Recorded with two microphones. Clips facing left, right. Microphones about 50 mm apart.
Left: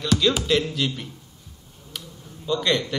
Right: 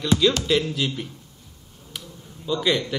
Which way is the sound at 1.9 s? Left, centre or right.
Centre.